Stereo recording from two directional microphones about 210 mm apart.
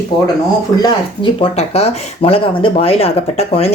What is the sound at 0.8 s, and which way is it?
Speech, 25° left (ahead or behind).